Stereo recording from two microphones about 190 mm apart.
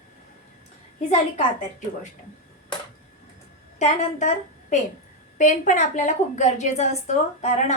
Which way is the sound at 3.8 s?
40° left (ahead or behind).